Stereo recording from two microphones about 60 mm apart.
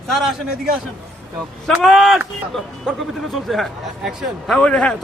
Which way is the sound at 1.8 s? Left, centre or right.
Centre.